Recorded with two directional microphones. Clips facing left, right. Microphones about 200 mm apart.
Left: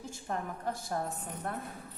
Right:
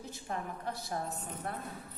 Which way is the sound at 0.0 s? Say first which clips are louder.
Left 2 dB; 45° left (ahead or behind).